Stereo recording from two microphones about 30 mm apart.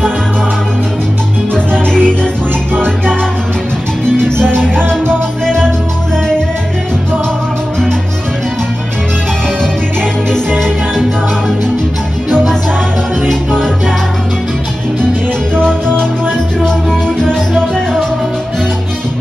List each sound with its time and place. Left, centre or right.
1.5 s music: left
10.3 s music: left
13.3 s music: centre
15.5 s music: left
17.6 s music: centre